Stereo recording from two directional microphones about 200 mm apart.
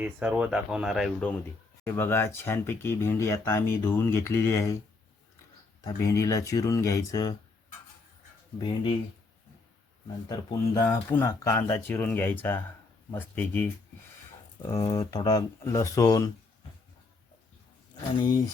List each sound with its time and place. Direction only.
0.0 s speech: 5° right (ahead or behind)
1.8 s speech: 10° left (ahead or behind)
5.8 s speech: 15° left (ahead or behind)
8.5 s speech: 20° left (ahead or behind)
10.8 s speech: 10° left (ahead or behind)
14.7 s speech: 20° left (ahead or behind)
18.2 s speech: 20° left (ahead or behind)